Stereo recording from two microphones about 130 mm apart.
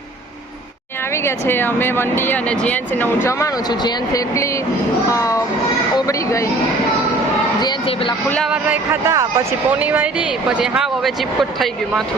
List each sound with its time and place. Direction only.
1.1 s speech: 20° left (ahead or behind)
7.6 s speech: 35° left (ahead or behind)
8.4 s speech: 10° right (ahead or behind)
9.6 s speech: 10° right (ahead or behind)